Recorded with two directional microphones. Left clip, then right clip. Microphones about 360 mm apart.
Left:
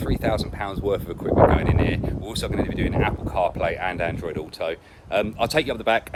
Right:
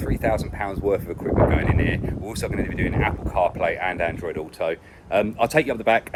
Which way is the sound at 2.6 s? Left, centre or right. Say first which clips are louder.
Left 1 dB; left.